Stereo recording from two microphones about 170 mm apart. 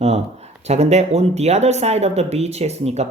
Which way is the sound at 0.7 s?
40° right (ahead or behind).